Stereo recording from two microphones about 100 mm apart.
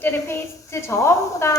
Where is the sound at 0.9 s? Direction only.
25° left (ahead or behind).